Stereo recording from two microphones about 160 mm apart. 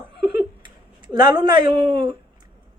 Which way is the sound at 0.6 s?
30° right (ahead or behind).